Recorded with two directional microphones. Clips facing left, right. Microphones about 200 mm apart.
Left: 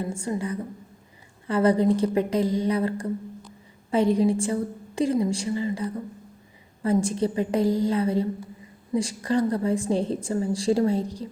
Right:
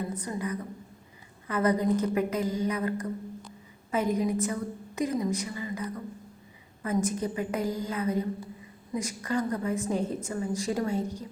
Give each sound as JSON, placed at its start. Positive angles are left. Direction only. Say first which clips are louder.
{"t": 0.0, "sound": "a woman's voice", "louder": "left 4 dB", "side_deg": 25}